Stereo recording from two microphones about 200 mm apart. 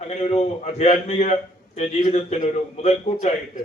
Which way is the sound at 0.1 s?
35° left (ahead or behind).